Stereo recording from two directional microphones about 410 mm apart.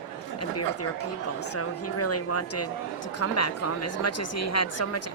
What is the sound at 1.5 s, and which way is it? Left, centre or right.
Speech, left.